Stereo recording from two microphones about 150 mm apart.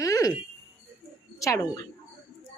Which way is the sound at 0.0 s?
25° left (ahead or behind).